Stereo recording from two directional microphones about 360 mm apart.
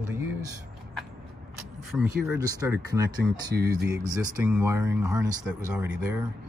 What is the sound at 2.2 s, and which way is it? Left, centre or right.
Speech, centre.